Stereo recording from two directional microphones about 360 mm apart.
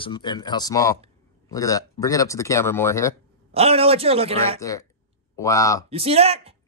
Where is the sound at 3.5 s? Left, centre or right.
Centre.